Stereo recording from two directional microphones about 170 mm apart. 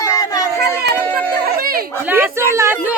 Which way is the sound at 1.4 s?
60° right (ahead or behind).